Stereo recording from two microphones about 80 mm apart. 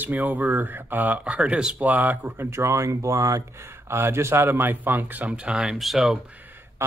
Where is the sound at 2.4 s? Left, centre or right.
Right.